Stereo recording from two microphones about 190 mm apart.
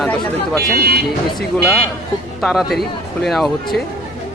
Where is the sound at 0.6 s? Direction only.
50° right (ahead or behind).